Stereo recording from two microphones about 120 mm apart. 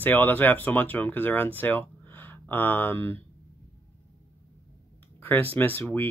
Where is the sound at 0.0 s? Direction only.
15° left (ahead or behind).